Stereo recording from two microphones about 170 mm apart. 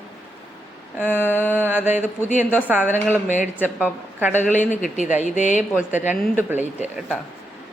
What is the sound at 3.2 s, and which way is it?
Speech, 45° left (ahead or behind).